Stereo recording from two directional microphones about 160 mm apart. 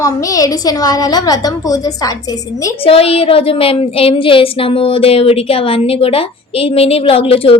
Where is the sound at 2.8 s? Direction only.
35° left (ahead or behind).